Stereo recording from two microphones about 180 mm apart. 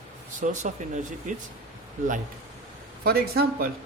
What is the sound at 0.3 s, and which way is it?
Speech, 45° right (ahead or behind).